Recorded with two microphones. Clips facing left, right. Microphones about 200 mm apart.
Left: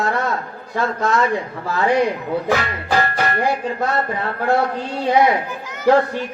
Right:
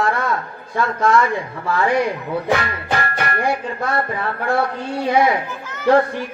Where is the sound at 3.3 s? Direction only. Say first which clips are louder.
Left 1 dB; 25° left (ahead or behind).